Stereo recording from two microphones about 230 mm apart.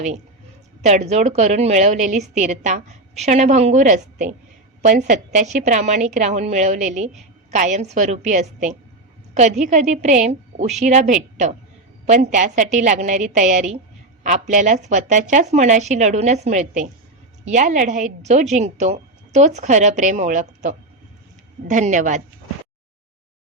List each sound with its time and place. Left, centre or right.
0.8 s a woman's voice: right